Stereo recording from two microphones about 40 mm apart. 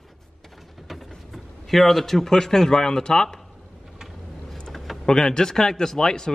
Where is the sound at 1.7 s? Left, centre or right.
Centre.